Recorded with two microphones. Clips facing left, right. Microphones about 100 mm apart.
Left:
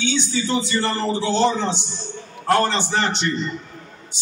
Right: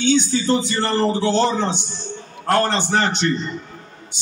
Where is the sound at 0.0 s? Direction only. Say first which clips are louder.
Right 5 dB; 45° right (ahead or behind).